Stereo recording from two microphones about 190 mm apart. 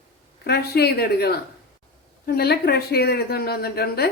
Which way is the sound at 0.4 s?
55° left (ahead or behind).